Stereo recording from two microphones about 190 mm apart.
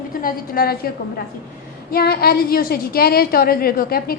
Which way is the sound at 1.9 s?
55° left (ahead or behind).